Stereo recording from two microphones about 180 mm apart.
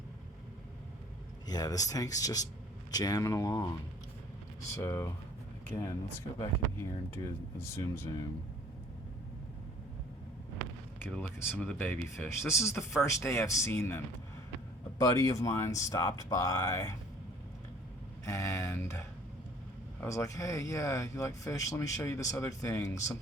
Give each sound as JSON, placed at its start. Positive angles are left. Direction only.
{"t": 1.5, "sound": "speech", "side_deg": 20}
{"t": 4.7, "sound": "speech", "side_deg": 15}
{"t": 11.1, "sound": "speech", "side_deg": 10}
{"t": 18.3, "sound": "speech", "side_deg": 15}